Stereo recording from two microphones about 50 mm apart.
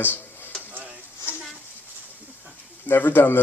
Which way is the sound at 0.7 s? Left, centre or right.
Right.